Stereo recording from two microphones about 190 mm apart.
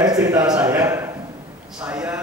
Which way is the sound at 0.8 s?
15° right (ahead or behind).